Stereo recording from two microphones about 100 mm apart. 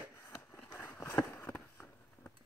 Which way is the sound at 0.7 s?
30° left (ahead or behind).